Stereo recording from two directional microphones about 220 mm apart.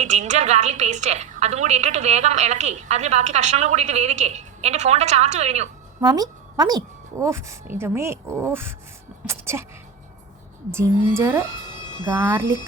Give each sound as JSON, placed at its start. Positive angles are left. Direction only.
{"t": 0.0, "sound": "a woman's voice", "side_deg": -30}
{"t": 6.0, "sound": "a woman's voice", "side_deg": -15}
{"t": 9.2, "sound": "a sound", "side_deg": -10}
{"t": 10.7, "sound": "a woman's voice", "side_deg": -10}